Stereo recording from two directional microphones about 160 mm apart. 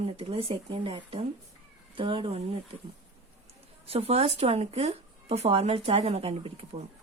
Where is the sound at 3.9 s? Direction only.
40° right (ahead or behind).